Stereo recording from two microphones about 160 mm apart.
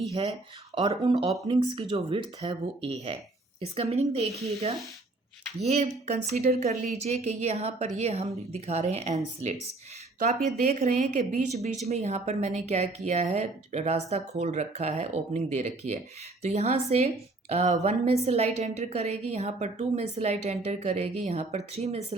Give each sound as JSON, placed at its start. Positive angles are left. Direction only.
{"t": 0.1, "sound": "speech", "side_deg": -40}
{"t": 0.8, "sound": "speech", "side_deg": -30}
{"t": 5.6, "sound": "a woman's voice", "side_deg": -40}
{"t": 10.2, "sound": "a woman's voice", "side_deg": -45}